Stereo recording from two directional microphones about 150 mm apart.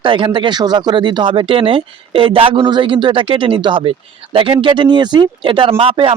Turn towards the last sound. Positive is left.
turn(degrees=-35)  # may be behind; listen again after turning